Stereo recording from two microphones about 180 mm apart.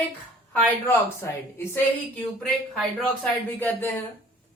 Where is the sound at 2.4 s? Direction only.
Centre (ahead or behind).